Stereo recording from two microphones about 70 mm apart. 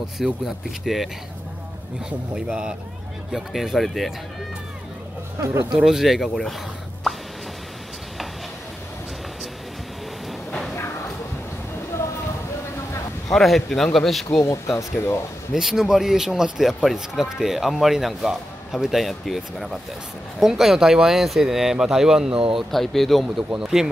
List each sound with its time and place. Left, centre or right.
0.2 s speech: centre
2.0 s speech: centre
5.4 s speech: right
5.8 s speech: centre
13.3 s speech: centre
15.5 s speech: centre